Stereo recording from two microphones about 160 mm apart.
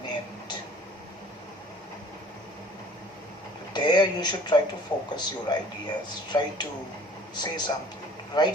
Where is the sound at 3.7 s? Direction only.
25° left (ahead or behind).